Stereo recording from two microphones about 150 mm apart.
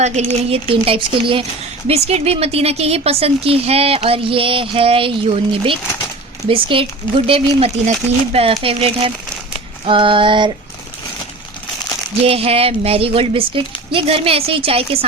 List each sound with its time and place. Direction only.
0.0 s a woman's voice: 45° right (ahead or behind)
12.2 s speech: 40° right (ahead or behind)